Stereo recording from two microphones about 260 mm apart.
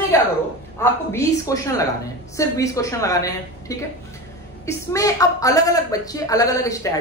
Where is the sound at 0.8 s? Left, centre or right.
Centre.